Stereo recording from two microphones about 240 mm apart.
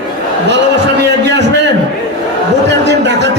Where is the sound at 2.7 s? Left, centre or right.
Right.